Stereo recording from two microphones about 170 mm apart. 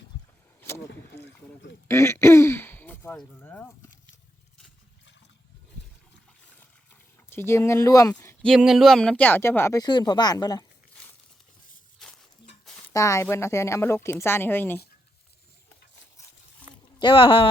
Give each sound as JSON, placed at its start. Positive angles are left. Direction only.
{"t": 0.6, "sound": "a sound", "side_deg": 15}
{"t": 1.9, "sound": "throat clearing", "side_deg": 15}
{"t": 7.3, "sound": "speech", "side_deg": 15}
{"t": 8.4, "sound": "speech", "side_deg": 0}
{"t": 12.0, "sound": "horse", "side_deg": 0}
{"t": 12.9, "sound": "speech", "side_deg": 20}
{"t": 17.0, "sound": "speech", "side_deg": 30}